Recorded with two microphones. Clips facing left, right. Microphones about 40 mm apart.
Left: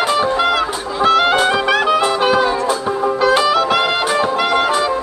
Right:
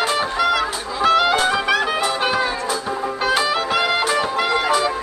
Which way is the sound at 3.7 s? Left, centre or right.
Left.